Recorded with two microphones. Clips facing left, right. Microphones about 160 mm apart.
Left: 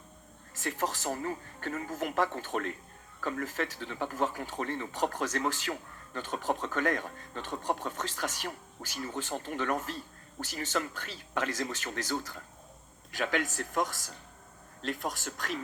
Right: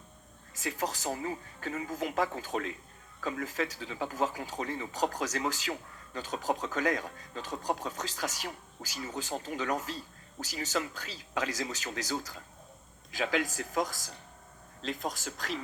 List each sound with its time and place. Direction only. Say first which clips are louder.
0.6 s a woman's voice: left 1 dB; 55° left (ahead or behind)